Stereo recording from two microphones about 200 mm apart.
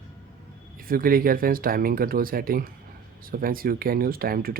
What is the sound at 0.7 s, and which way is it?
Speech, 45° right (ahead or behind).